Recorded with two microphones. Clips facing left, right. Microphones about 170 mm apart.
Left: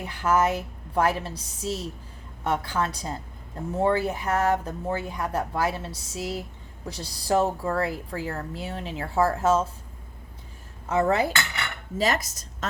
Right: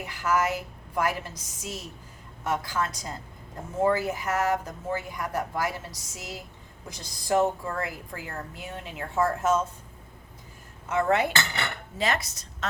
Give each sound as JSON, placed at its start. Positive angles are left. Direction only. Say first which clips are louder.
{"t": 0.2, "sound": "speech", "louder": "left 3 dB", "side_deg": 30}
{"t": 10.8, "sound": "speech", "louder": "left 2 dB", "side_deg": 35}